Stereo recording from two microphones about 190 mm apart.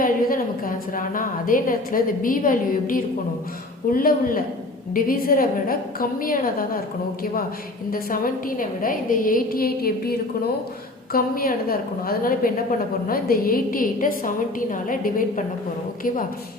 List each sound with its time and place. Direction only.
0.0 s a woman's voice: 45° left (ahead or behind)
7.9 s a woman's voice: 50° left (ahead or behind)